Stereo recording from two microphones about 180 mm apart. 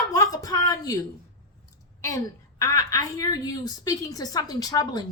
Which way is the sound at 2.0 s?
15° left (ahead or behind).